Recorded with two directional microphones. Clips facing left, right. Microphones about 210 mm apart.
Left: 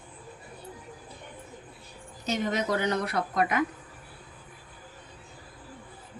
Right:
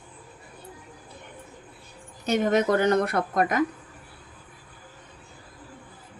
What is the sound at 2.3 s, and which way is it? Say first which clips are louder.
A woman's voice: right 6 dB; 50° right (ahead or behind).